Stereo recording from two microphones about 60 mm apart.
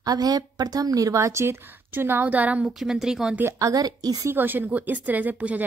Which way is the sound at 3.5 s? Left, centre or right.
Right.